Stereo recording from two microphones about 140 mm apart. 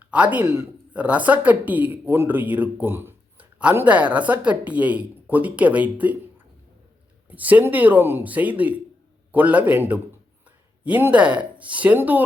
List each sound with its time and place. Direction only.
0.0 s speech: 10° right (ahead or behind)
7.3 s speech: 10° right (ahead or behind)